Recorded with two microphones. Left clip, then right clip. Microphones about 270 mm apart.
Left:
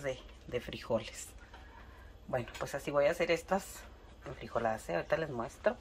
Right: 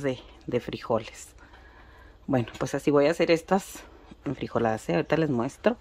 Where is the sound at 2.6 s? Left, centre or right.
Right.